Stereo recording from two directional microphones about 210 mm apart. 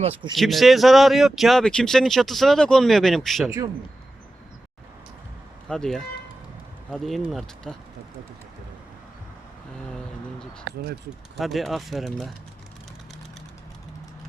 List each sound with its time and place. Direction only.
0.0 s speech: 30° right (ahead or behind)
0.3 s speech: centre (ahead or behind)
5.6 s speech: 5° left (ahead or behind)
11.3 s speech: centre (ahead or behind)